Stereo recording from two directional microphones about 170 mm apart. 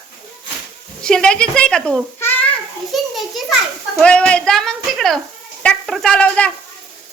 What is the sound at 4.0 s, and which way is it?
Sizzle, 5° left (ahead or behind).